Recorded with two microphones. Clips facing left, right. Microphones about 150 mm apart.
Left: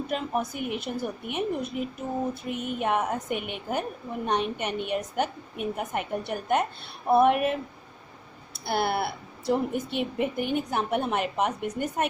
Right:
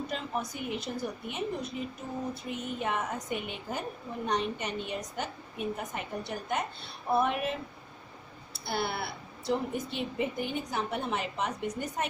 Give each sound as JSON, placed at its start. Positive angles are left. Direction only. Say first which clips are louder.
{"t": 0.1, "sound": "a woman's voice", "louder": "left 6 dB", "side_deg": 60}
{"t": 8.6, "sound": "a woman's voice", "louder": "left 6 dB", "side_deg": 60}